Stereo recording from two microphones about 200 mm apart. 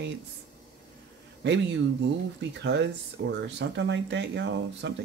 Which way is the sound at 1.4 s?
65° right (ahead or behind).